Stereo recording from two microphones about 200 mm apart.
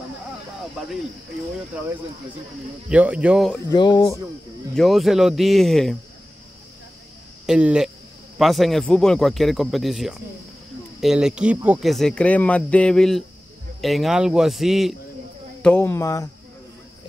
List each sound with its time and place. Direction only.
2.9 s speech: 5° right (ahead or behind)
3.7 s speech: 20° left (ahead or behind)
4.7 s speech: centre (ahead or behind)
7.4 s speech: 5° right (ahead or behind)
15.6 s speech: 10° left (ahead or behind)